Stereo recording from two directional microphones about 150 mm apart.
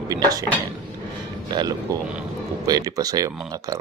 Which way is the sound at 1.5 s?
30° right (ahead or behind).